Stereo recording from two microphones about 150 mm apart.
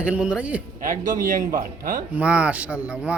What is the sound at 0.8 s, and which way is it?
A man's voice, 60° right (ahead or behind).